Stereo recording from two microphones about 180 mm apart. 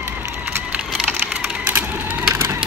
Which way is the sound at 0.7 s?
5° right (ahead or behind).